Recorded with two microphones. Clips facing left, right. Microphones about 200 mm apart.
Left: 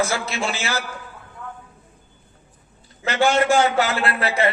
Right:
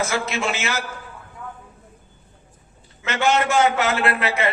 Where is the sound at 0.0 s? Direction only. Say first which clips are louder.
Even; 35° left (ahead or behind).